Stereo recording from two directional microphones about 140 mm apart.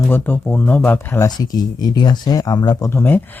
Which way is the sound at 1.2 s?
30° left (ahead or behind).